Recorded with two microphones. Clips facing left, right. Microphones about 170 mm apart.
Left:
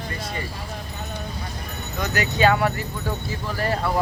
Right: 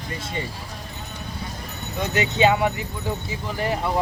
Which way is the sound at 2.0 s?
20° right (ahead or behind).